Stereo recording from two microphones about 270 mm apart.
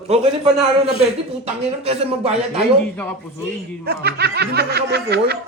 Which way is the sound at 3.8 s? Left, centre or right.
Right.